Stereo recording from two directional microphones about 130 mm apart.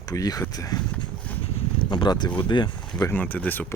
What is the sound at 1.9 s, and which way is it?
Speech, 35° left (ahead or behind).